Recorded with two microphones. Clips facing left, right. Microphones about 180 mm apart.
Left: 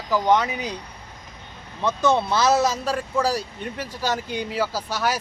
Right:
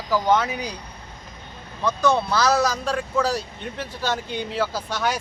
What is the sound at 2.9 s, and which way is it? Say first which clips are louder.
Speech: even; 10° left (ahead or behind).